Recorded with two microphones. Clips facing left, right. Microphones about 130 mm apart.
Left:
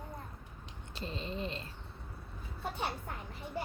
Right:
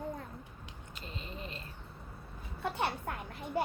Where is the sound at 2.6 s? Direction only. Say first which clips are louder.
Right 4 dB; 65° right (ahead or behind).